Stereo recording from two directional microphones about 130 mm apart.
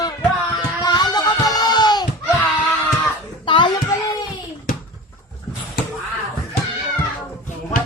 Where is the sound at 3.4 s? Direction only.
40° left (ahead or behind).